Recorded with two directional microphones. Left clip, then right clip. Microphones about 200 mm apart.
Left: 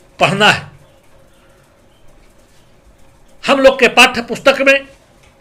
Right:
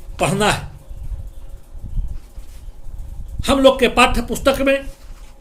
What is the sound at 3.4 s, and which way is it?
Speech, 25° right (ahead or behind).